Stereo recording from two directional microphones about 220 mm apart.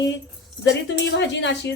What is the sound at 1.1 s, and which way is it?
Speech, 50° left (ahead or behind).